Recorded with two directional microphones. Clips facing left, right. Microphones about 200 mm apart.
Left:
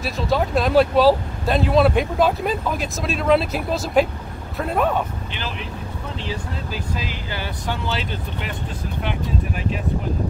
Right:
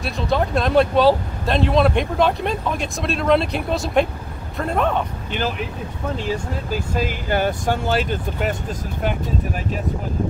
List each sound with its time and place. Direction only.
0.0 s speech: 5° left (ahead or behind)
6.2 s speech: 45° right (ahead or behind)